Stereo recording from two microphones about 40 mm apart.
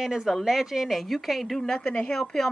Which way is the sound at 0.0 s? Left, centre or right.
Centre.